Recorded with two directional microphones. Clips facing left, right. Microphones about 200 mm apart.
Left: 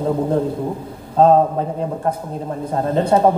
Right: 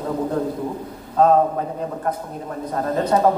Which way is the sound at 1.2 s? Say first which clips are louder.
Left 3 dB; 30° left (ahead or behind).